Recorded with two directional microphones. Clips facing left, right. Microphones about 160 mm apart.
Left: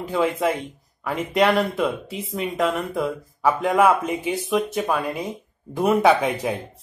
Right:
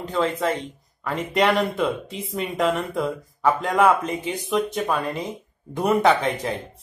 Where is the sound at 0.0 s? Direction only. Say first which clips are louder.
Left 2 dB; 10° left (ahead or behind).